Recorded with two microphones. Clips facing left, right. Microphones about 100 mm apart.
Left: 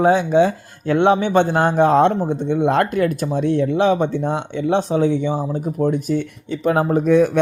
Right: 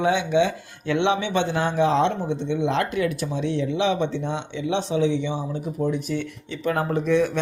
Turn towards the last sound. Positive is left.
turn(degrees=45)  # may be behind; listen again after turning